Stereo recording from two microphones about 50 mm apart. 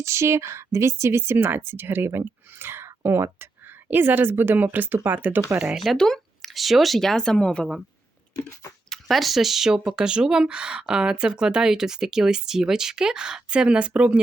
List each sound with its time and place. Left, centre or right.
0.0 s speech: right
1.4 s speech: right
3.8 s speech: right
5.7 s speech: centre
6.0 s a sound: centre
6.5 s speech: centre
8.4 s a sound: left
8.9 s speech: centre; by 14.2 s right